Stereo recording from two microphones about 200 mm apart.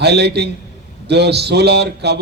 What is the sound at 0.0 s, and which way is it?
A man's voice, 55° right (ahead or behind).